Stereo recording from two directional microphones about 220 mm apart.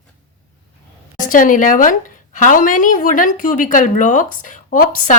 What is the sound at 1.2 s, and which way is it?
A woman's voice, 35° left (ahead or behind).